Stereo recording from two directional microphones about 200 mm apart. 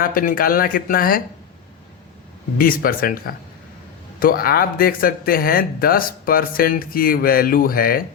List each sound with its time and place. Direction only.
0.0 s speech: 45° left (ahead or behind)
2.6 s speech: 45° left (ahead or behind)